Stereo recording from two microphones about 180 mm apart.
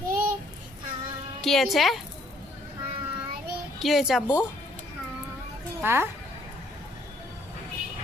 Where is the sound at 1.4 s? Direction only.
Centre (ahead or behind).